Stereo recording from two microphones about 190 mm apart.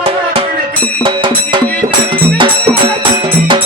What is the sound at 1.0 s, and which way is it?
Music, 25° right (ahead or behind).